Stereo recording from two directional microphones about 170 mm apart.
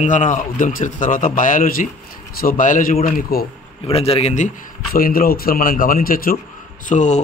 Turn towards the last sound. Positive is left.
turn(degrees=45)  # may be behind; listen again after turning